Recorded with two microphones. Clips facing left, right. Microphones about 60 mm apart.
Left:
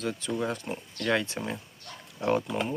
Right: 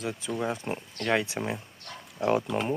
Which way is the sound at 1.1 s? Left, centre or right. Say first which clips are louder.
Right 1 dB; centre.